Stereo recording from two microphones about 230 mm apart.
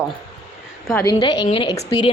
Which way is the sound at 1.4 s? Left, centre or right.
Left.